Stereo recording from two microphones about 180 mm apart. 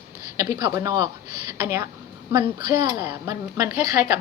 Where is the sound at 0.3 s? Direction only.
20° right (ahead or behind).